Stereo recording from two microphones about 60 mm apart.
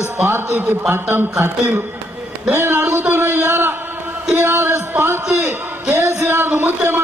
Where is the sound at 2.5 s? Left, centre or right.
Right.